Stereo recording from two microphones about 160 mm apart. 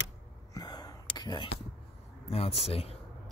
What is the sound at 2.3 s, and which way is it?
Speech, 40° left (ahead or behind).